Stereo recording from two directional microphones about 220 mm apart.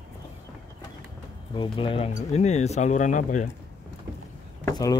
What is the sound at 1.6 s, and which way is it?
Speech, 25° left (ahead or behind).